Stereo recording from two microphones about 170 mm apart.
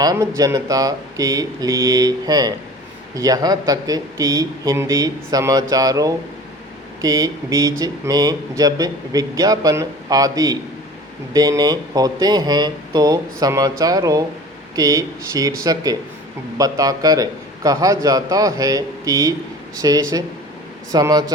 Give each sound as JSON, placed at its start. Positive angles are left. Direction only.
{"t": 0.0, "sound": "speech", "side_deg": -20}